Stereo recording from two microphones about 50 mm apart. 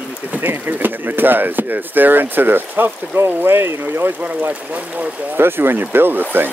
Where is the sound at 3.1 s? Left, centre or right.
Right.